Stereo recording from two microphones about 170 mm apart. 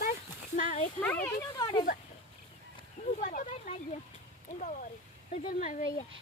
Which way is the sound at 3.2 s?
55° left (ahead or behind).